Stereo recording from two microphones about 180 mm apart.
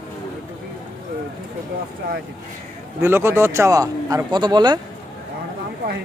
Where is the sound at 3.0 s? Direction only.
15° right (ahead or behind).